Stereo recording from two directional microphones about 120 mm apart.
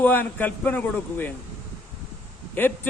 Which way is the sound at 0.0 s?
15° left (ahead or behind).